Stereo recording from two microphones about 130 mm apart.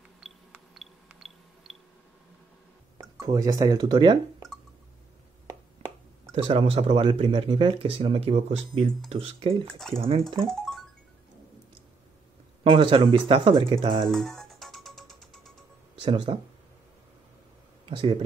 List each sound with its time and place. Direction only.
0.2 s a sound: centre (ahead or behind)
3.0 s speech: 25° right (ahead or behind)
6.3 s speech: 50° right (ahead or behind)
9.7 s speech: 5° left (ahead or behind)
10.5 s music: centre (ahead or behind)
12.6 s speech: 40° right (ahead or behind)
14.0 s music: 5° left (ahead or behind)
16.0 s speech: 40° right (ahead or behind)
17.8 s speech: 40° right (ahead or behind)